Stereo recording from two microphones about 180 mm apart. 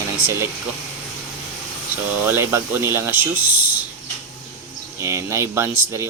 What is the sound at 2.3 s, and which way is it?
Speech, 15° right (ahead or behind).